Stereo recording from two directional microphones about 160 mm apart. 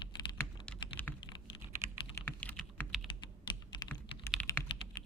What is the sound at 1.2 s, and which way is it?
Computer keyboard, 30° left (ahead or behind).